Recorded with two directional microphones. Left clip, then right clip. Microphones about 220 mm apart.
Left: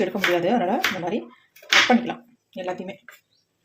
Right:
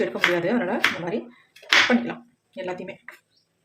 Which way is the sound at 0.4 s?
25° left (ahead or behind).